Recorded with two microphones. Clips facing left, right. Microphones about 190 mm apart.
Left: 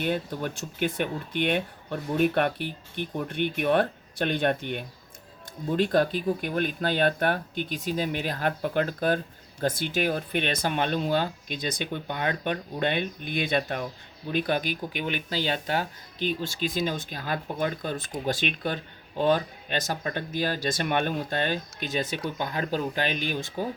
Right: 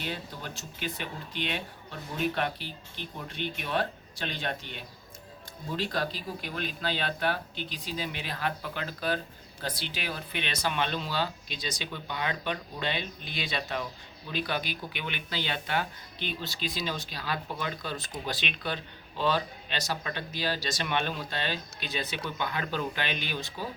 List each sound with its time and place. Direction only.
0.0 s speech: 55° left (ahead or behind)